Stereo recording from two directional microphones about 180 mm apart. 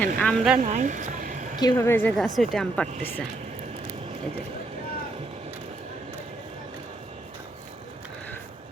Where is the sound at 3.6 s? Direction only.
35° right (ahead or behind).